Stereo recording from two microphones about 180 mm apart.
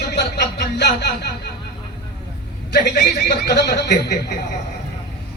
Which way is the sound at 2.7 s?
65° left (ahead or behind).